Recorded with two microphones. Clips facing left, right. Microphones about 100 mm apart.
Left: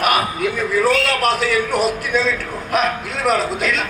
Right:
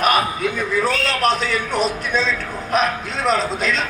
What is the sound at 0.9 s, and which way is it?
Speech, 30° right (ahead or behind).